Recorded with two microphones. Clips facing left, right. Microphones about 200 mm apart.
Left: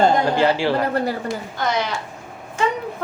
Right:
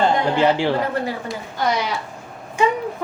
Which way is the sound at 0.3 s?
20° right (ahead or behind).